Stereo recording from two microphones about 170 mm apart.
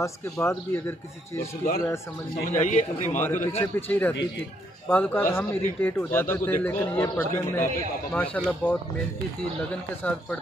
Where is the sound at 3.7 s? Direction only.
10° left (ahead or behind).